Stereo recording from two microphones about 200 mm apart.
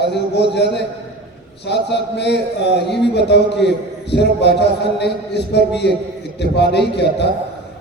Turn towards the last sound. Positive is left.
turn(degrees=55)  # may be behind; listen again after turning